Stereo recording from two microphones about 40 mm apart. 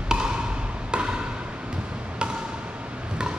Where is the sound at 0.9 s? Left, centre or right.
Right.